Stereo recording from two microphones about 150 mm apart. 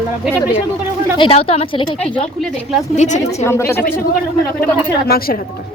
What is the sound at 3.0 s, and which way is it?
Speech, 55° left (ahead or behind).